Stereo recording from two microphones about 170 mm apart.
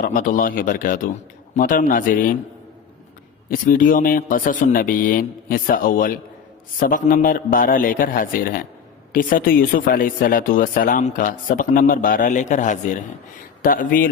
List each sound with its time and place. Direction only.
0.0 s speech: 50° left (ahead or behind)
3.5 s speech: 55° left (ahead or behind)